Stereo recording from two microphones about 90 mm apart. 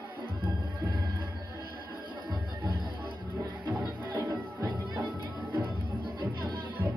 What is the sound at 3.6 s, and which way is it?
Music, 20° right (ahead or behind).